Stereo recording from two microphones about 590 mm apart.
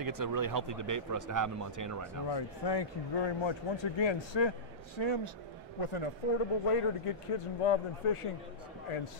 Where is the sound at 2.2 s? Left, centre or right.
Left.